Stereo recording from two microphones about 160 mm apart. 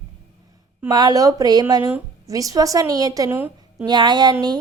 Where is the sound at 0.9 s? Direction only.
25° right (ahead or behind).